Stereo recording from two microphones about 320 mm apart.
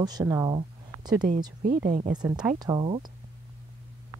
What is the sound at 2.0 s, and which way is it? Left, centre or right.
Speech, centre.